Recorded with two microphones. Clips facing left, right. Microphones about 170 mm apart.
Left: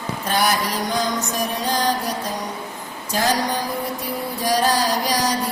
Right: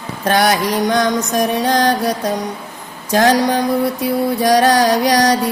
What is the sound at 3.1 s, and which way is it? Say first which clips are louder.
Mantra: right 8 dB; 70° right (ahead or behind).